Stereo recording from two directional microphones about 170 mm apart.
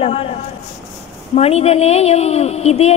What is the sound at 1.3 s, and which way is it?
A woman's voice, 35° left (ahead or behind).